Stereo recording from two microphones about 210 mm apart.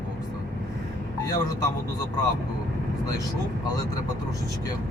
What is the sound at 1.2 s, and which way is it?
Speech, 20° left (ahead or behind).